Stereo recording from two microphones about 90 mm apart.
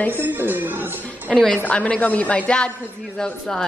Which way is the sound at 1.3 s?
10° left (ahead or behind).